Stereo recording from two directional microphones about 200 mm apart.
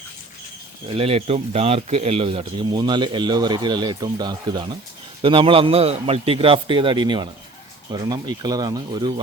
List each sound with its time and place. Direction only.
0.9 s speech: 30° right (ahead or behind)